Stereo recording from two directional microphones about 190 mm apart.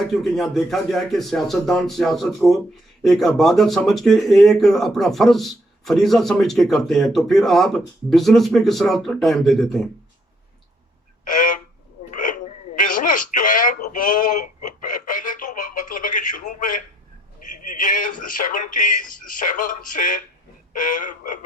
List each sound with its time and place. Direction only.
0.1 s speech: centre (ahead or behind)
11.3 s a sound: 45° left (ahead or behind)
12.1 s telephone: 45° left (ahead or behind)
17.7 s speech: 45° left (ahead or behind)